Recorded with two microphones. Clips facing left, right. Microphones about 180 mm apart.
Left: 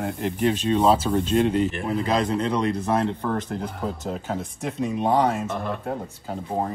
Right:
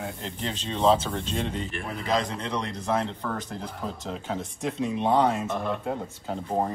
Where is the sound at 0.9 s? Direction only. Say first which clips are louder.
Left 7 dB; 5° left (ahead or behind).